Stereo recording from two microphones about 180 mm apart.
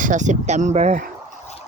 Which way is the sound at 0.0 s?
45° right (ahead or behind).